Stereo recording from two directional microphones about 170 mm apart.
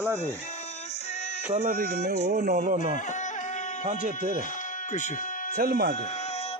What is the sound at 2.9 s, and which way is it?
Music, 45° left (ahead or behind).